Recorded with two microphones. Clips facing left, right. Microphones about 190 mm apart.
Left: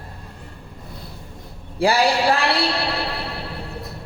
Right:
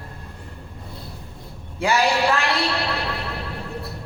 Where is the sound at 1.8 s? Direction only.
35° left (ahead or behind).